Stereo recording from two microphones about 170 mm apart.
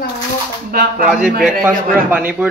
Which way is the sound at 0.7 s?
60° right (ahead or behind).